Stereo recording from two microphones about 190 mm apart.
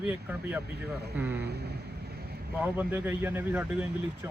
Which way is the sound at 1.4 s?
60° right (ahead or behind).